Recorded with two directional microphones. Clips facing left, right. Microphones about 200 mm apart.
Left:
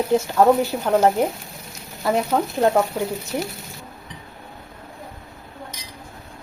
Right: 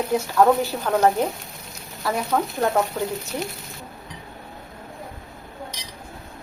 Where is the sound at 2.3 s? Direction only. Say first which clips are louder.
Left 2 dB; 20° left (ahead or behind).